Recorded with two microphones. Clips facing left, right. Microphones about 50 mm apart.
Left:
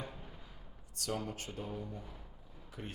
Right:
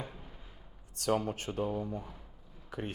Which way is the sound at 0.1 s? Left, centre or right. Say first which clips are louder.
Even; centre.